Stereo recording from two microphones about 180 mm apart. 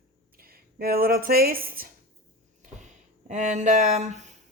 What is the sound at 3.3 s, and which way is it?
Speech, 40° right (ahead or behind).